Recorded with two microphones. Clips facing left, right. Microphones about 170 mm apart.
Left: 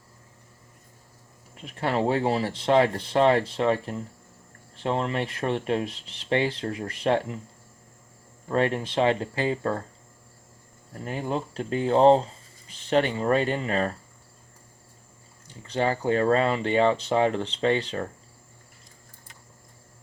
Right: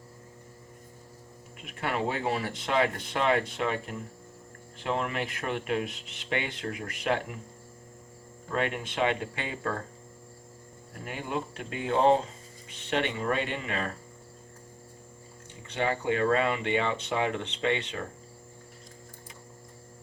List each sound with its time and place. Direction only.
1.6 s speech: 30° left (ahead or behind)
8.4 s speech: 35° left (ahead or behind)
11.0 s speech: 35° left (ahead or behind)
15.6 s speech: 35° left (ahead or behind)